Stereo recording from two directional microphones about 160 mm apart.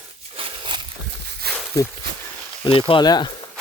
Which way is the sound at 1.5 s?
80° right.